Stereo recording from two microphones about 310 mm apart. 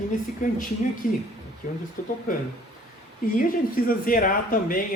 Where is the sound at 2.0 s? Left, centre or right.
Left.